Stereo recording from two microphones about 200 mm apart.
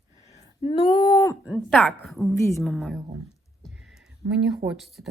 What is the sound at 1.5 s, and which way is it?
Speech, centre (ahead or behind).